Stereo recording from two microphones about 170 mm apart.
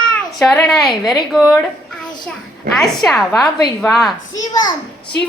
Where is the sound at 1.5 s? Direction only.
5° left (ahead or behind).